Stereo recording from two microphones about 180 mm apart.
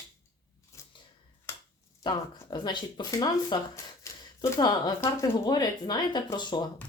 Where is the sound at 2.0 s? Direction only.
25° left (ahead or behind).